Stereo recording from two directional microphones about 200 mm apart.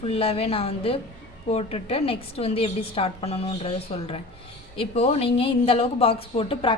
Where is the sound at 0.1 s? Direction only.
30° left (ahead or behind).